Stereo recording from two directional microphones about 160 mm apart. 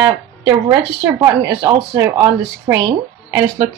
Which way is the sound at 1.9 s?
15° right (ahead or behind).